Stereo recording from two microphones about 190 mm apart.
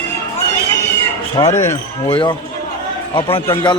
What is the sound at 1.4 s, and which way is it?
Speech, 15° left (ahead or behind).